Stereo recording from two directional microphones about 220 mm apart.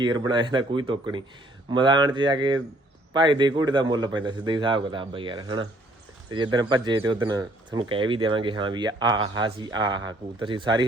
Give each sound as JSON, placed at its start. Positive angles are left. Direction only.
{"t": 0.0, "sound": "speech", "side_deg": -20}